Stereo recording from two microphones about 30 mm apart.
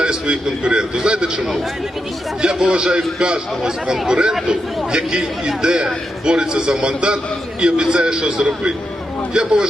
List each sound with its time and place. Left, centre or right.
0.0 s a man's voice: right
2.4 s a man's voice: right